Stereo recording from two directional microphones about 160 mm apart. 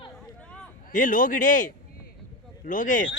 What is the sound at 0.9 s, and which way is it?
Speech, 55° left (ahead or behind).